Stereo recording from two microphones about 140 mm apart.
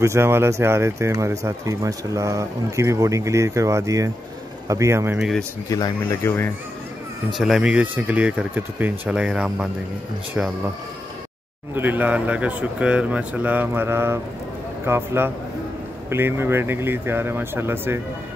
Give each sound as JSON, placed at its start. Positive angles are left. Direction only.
{"t": 0.0, "sound": "speech", "side_deg": -20}
{"t": 5.7, "sound": "speech", "side_deg": 25}
{"t": 7.3, "sound": "speech", "side_deg": 0}
{"t": 11.7, "sound": "speech", "side_deg": -15}